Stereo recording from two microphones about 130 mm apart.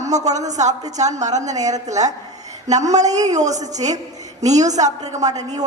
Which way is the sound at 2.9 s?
65° right (ahead or behind).